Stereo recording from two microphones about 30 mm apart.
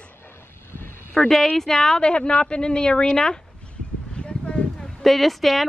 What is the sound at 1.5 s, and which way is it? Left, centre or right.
Speech, centre.